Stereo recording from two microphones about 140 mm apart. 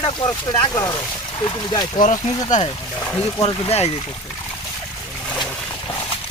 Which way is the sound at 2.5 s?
60° left (ahead or behind).